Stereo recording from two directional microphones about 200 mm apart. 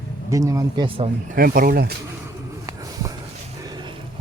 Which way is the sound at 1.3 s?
45° right (ahead or behind).